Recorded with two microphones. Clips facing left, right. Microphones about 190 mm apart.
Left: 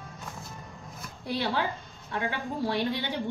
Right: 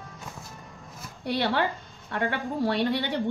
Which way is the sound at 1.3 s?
65° right (ahead or behind).